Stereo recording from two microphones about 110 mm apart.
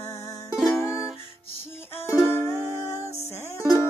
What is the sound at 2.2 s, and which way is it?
Music, 20° left (ahead or behind).